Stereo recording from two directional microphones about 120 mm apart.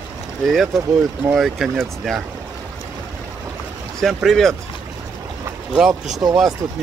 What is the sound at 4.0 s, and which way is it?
Speech, centre (ahead or behind).